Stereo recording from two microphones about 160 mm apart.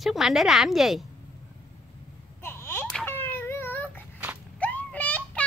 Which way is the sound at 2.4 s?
15° left (ahead or behind).